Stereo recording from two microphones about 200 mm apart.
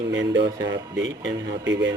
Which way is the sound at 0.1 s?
60° right (ahead or behind).